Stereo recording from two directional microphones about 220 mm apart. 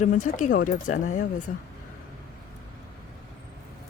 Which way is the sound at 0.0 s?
35° left (ahead or behind).